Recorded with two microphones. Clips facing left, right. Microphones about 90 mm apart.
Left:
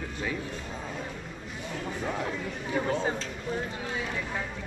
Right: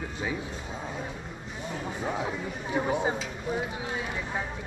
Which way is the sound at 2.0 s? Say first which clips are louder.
Right 1 dB; 10° right (ahead or behind).